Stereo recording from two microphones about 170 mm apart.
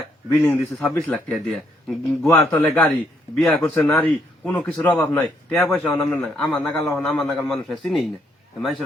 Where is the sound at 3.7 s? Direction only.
15° left (ahead or behind).